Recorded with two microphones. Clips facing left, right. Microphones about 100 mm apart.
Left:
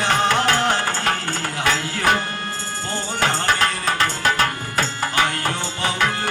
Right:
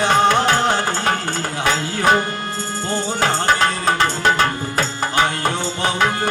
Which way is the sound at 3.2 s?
30° right (ahead or behind).